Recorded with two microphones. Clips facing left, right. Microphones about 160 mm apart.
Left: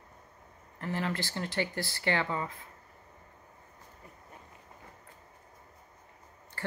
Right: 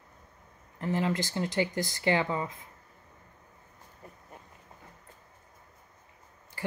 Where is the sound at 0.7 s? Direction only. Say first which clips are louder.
Right 4 dB; 20° right (ahead or behind).